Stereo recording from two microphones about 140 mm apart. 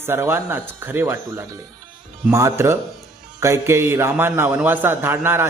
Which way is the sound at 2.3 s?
20° right (ahead or behind).